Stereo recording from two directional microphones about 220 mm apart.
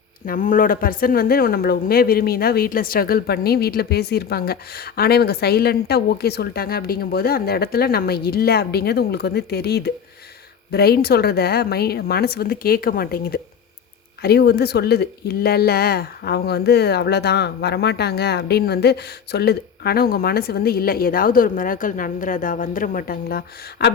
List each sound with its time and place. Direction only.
0.3 s speech: 40° left (ahead or behind)